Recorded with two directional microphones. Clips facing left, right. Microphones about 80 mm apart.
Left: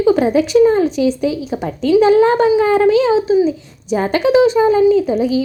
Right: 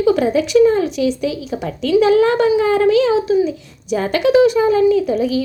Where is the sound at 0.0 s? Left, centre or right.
Left.